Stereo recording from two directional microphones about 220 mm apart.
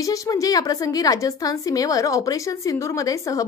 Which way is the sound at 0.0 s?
15° left (ahead or behind).